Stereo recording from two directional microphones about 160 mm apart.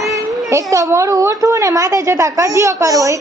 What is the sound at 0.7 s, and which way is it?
A woman's voice, 20° right (ahead or behind).